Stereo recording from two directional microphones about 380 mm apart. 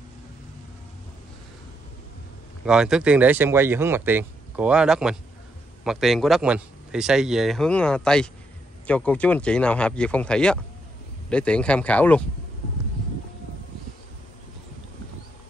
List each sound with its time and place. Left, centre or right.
2.6 s speech: centre